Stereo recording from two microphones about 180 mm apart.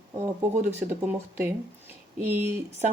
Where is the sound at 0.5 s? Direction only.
40° right (ahead or behind).